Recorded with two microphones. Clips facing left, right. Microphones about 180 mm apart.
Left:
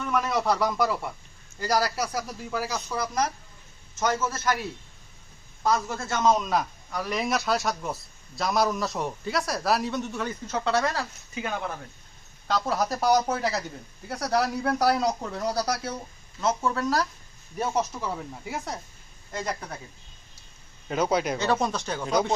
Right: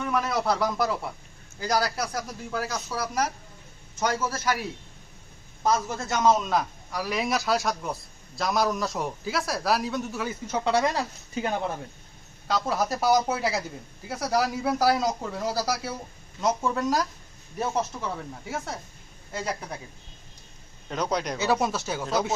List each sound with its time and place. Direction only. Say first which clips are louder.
0.0 s speech: even; 5° right (ahead or behind)
5.6 s a man's voice: even; 20° right (ahead or behind)
6.4 s speech: even; centre (ahead or behind); by 11.0 s 15° right (ahead or behind)
11.3 s a man's voice: right 3 dB; 30° right (ahead or behind)
12.5 s speech: even; centre (ahead or behind)
16.4 s speech: even; 15° right (ahead or behind)
17.6 s speech: left 1 dB; centre (ahead or behind)
20.8 s speech: left 3 dB; 5° left (ahead or behind)
21.3 s speech: even; 5° right (ahead or behind)